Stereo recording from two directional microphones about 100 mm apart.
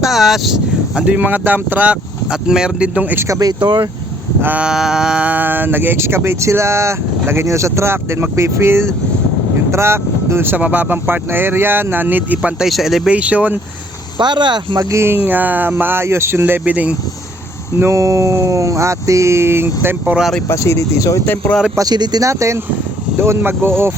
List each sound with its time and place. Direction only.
0.0 s speech: centre (ahead or behind)
3.2 s speech: 30° right (ahead or behind)
3.6 s speech: 55° right (ahead or behind)
4.4 s speech: 15° right (ahead or behind)
13.1 s speech: 15° right (ahead or behind)
14.2 s speech: 50° right (ahead or behind)
14.8 s speech: 25° right (ahead or behind)
17.7 s speech: 30° right (ahead or behind)
20.5 s speech: 30° left (ahead or behind)
21.8 s speech: 45° right (ahead or behind); by 23.9 s 25° right (ahead or behind)